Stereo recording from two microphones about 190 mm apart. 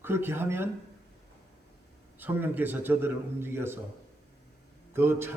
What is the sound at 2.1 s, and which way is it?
A man's voice, 10° right (ahead or behind).